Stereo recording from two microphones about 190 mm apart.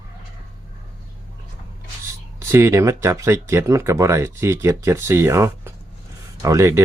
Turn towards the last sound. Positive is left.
turn(degrees=-15)  # may be behind; listen again after turning